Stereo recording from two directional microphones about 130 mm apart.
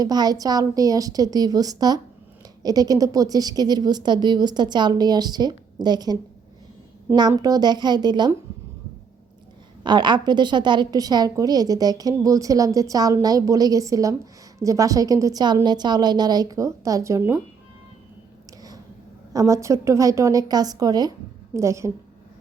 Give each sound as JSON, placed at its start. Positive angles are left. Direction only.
{"t": 0.0, "sound": "a woman's voice", "side_deg": -30}
{"t": 7.2, "sound": "a woman's voice", "side_deg": -30}
{"t": 9.8, "sound": "a woman's voice", "side_deg": -35}
{"t": 19.3, "sound": "a woman's voice", "side_deg": -25}